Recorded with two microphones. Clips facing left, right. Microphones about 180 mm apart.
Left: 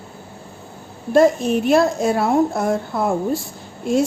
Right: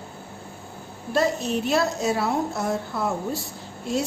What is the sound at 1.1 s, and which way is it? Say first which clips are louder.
A woman's voice: left 9 dB; 50° left (ahead or behind).